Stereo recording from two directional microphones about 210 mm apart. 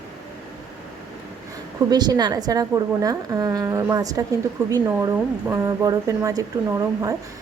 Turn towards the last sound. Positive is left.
turn(degrees=-15)  # may be behind; listen again after turning